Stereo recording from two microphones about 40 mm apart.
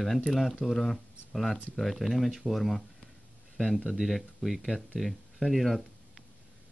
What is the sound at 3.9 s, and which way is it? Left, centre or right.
Speech, centre.